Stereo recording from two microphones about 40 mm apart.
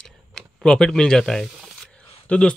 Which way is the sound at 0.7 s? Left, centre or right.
Centre.